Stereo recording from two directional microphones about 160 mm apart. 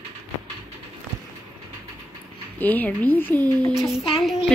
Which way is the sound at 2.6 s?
10° left (ahead or behind).